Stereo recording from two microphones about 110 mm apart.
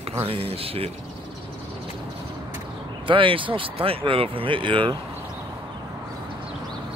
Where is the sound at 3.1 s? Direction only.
50° right (ahead or behind).